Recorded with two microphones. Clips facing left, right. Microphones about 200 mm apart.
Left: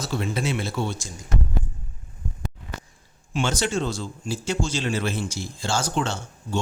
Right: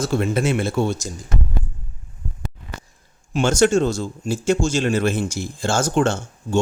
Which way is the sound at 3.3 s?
45° right (ahead or behind).